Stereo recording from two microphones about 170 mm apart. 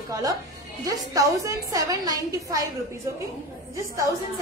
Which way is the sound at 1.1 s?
20° right (ahead or behind).